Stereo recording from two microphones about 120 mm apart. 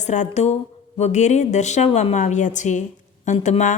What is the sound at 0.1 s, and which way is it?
A woman's voice, 80° left.